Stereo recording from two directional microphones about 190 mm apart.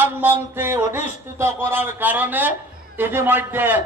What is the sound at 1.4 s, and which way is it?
A man's voice, 10° right (ahead or behind).